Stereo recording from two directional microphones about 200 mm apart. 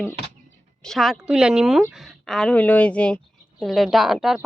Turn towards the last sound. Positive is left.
turn(degrees=0)  # may be behind; listen again after turning